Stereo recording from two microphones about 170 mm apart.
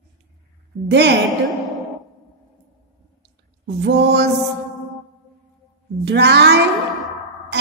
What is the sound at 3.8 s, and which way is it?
Speech, 90° right.